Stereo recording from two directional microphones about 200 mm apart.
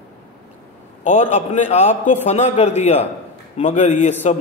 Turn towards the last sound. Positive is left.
turn(degrees=35)  # may be behind; listen again after turning